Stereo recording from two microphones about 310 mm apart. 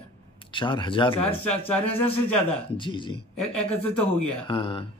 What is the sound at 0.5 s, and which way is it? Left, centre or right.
Speech, centre.